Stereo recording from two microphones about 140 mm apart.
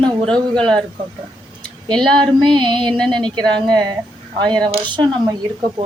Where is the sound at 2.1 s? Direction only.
35° right (ahead or behind).